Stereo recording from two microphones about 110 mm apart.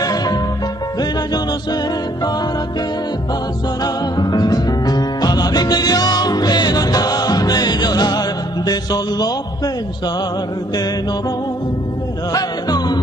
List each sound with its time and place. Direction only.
0.0 s music: 35° left (ahead or behind)
3.8 s music: 40° left (ahead or behind)
12.3 s music: 35° left (ahead or behind)